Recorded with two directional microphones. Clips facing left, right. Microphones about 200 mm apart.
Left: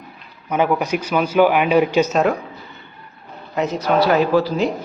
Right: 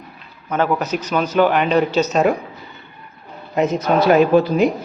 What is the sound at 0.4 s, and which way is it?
A man's voice, 10° left (ahead or behind).